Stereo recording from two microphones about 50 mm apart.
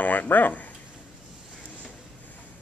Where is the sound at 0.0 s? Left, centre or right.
Left.